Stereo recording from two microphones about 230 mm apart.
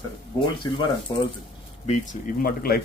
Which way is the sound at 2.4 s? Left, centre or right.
Left.